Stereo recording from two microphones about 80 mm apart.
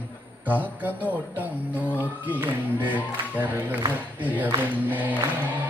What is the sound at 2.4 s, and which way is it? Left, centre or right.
Music, right.